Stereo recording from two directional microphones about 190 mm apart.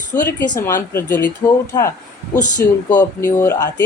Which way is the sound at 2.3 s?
40° left (ahead or behind).